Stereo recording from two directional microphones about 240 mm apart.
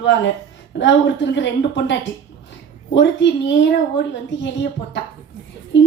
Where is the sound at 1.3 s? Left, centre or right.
Left.